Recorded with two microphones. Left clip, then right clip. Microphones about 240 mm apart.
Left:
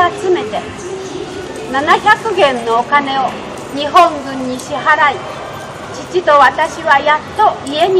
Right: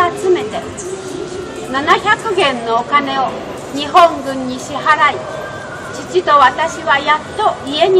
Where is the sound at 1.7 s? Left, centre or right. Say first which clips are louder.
Left 2 dB; right.